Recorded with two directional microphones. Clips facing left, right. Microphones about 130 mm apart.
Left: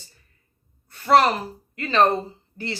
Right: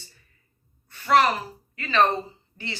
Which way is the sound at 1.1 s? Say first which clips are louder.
Left 3 dB; 35° left (ahead or behind).